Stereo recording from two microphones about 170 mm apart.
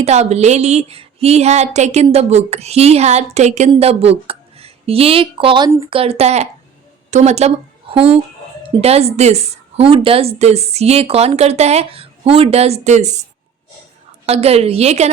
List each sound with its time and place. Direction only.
0.0 s a woman's voice: 40° right (ahead or behind)
14.3 s a woman's voice: 35° right (ahead or behind)